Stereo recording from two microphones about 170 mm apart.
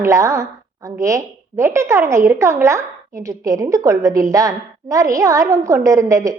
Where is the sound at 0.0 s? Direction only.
20° right (ahead or behind).